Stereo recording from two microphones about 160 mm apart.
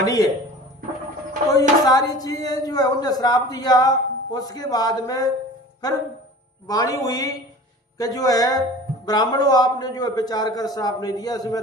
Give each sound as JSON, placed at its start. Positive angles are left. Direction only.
{"t": 0.0, "sound": "speech", "side_deg": 20}
{"t": 1.8, "sound": "a woman's voice", "side_deg": 25}
{"t": 6.7, "sound": "a woman's voice", "side_deg": 20}